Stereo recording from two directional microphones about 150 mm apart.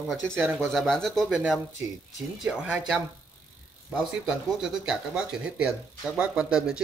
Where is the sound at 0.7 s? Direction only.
5° left (ahead or behind).